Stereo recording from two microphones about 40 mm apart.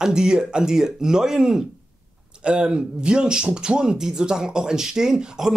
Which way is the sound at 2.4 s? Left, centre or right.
Right.